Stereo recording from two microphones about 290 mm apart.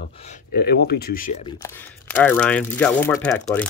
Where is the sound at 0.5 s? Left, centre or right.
Left.